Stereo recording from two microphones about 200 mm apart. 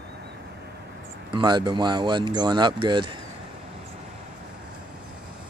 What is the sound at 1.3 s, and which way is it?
Speech, 25° right (ahead or behind).